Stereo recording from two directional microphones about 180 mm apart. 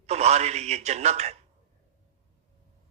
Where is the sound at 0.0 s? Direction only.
35° right (ahead or behind).